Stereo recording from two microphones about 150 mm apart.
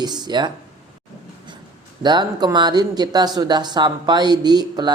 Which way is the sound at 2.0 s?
30° right (ahead or behind).